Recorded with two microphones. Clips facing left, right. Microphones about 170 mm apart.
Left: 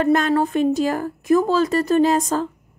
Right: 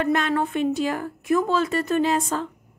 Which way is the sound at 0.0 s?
40° left (ahead or behind).